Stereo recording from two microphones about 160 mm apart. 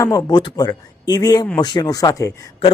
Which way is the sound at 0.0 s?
20° left (ahead or behind).